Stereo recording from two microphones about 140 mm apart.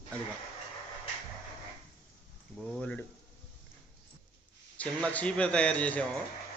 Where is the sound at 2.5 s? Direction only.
5° left (ahead or behind).